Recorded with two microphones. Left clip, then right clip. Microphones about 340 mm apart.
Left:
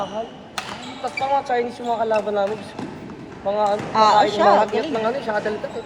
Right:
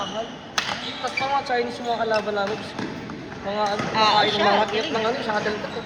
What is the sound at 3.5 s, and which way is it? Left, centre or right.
A man's voice, left.